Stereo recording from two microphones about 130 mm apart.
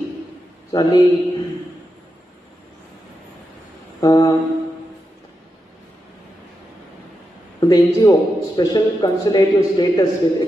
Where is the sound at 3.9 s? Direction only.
30° left (ahead or behind).